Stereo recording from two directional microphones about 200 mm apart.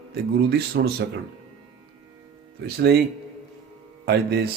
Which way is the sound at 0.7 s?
50° right (ahead or behind).